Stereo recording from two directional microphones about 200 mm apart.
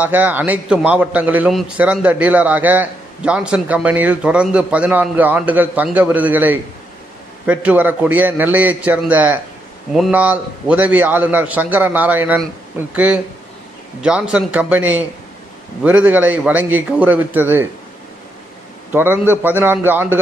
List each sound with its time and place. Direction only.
0.0 s a man's voice: 10° right (ahead or behind)
18.9 s a man's voice: 10° right (ahead or behind)